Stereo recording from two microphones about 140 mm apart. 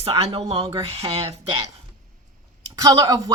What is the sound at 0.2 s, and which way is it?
Speech, 45° right (ahead or behind).